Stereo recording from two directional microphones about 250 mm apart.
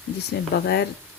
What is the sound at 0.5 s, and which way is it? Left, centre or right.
Speech, left.